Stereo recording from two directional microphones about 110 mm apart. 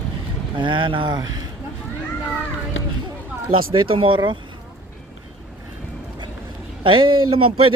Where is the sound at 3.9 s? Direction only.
50° right (ahead or behind).